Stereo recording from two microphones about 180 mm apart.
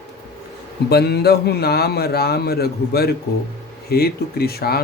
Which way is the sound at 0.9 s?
65° left (ahead or behind).